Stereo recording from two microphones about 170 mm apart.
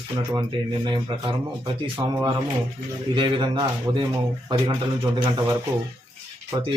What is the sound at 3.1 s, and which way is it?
Speech, 30° right (ahead or behind).